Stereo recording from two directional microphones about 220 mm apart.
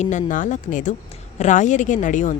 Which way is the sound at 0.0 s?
35° left (ahead or behind).